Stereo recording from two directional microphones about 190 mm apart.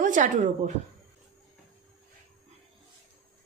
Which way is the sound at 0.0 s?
40° right (ahead or behind).